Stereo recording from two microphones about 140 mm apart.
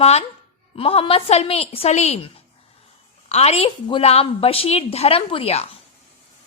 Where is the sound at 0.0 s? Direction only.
50° left (ahead or behind).